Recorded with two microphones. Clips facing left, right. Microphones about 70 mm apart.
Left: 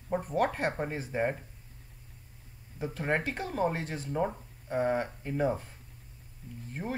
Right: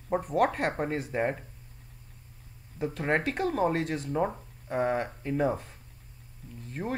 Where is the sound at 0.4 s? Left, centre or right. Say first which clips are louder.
Right 3 dB; right.